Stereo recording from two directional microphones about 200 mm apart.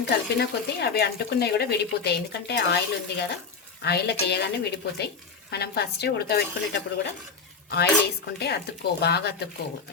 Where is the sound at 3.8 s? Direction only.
55° left (ahead or behind).